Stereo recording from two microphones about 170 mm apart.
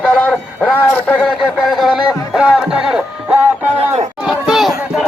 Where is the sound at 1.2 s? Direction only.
Centre (ahead or behind).